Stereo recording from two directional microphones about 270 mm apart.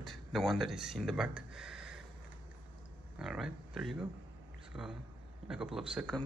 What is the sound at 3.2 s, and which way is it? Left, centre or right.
Speech, centre.